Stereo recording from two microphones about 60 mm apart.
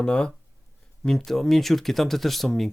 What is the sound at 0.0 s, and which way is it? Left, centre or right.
Speech, centre.